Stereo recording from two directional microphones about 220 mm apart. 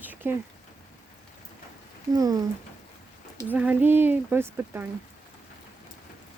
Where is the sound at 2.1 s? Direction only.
15° right (ahead or behind).